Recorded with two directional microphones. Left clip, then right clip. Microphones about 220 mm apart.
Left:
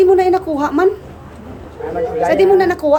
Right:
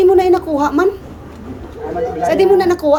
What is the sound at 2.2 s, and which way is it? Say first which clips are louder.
Speech: even; 5° left (ahead or behind).